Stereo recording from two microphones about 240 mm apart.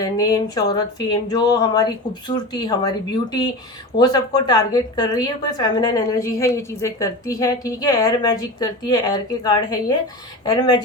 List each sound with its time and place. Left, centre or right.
0.0 s a woman's voice: centre